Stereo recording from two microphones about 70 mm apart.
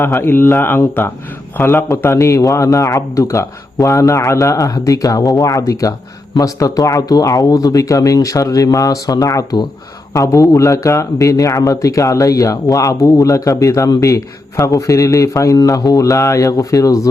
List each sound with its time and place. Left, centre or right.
0.0 s speech: left
10.2 s speech: left